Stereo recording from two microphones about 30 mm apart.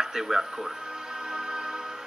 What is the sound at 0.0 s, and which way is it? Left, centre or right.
Music, centre.